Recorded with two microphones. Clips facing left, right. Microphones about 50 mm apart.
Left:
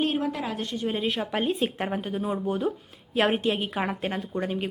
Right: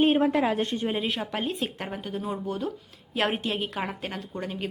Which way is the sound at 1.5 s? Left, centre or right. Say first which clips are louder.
Left 4 dB; centre.